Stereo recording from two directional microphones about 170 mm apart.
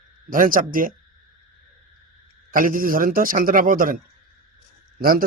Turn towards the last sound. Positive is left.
turn(degrees=-55)  # may be behind; listen again after turning